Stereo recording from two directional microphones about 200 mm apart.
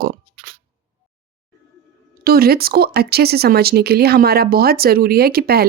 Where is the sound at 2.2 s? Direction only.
50° right (ahead or behind).